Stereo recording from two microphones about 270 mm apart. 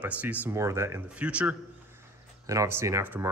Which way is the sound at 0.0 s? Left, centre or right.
Centre.